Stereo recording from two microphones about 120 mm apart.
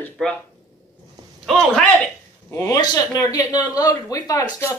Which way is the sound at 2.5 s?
20° left (ahead or behind).